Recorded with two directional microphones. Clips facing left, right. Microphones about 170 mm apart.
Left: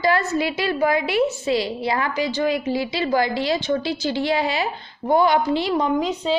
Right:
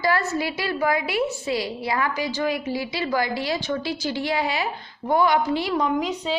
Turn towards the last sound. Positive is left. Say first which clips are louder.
# left 3 dB
turn(degrees=25)  # may be behind; listen again after turning